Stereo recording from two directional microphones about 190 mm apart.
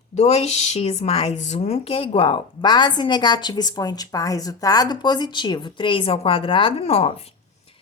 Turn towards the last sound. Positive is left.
turn(degrees=30)  # may be behind; listen again after turning